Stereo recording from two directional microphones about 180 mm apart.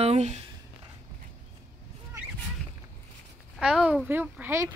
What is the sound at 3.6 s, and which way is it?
Speech, 5° right (ahead or behind).